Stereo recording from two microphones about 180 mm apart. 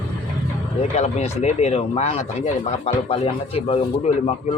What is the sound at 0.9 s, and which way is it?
Speech, 35° left (ahead or behind).